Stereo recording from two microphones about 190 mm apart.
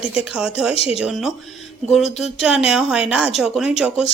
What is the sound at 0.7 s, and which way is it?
Speech, 30° left (ahead or behind).